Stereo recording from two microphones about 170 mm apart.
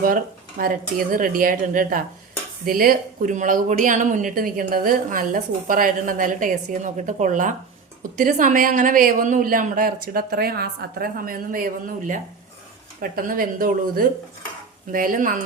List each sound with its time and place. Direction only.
0.6 s speech: 55° right (ahead or behind)